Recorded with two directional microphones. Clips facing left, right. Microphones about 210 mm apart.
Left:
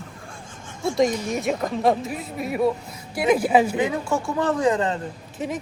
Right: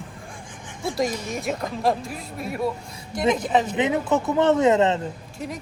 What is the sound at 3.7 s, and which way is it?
Speech, 20° right (ahead or behind).